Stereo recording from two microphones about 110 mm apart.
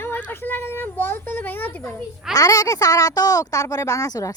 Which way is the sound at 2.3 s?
35° left (ahead or behind).